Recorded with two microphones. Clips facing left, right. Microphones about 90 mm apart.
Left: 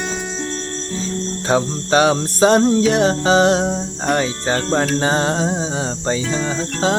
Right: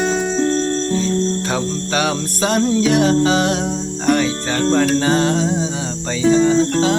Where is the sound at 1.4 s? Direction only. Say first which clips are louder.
Left 3 dB; 30° left (ahead or behind).